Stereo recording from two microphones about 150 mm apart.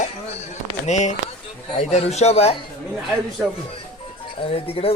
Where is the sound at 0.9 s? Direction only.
50° left (ahead or behind).